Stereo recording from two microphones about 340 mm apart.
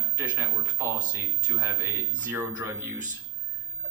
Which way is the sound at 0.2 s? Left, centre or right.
Centre.